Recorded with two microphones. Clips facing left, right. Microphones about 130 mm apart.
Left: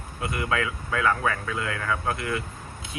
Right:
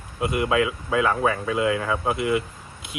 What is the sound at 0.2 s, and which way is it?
Speech, 15° right (ahead or behind).